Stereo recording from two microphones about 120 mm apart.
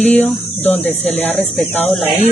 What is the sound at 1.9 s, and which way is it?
Speech, centre (ahead or behind).